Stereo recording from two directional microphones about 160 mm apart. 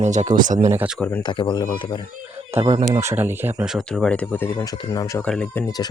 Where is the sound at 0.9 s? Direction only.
10° left (ahead or behind).